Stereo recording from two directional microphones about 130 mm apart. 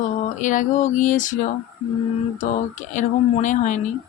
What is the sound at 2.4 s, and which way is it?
Speech, 75° left (ahead or behind).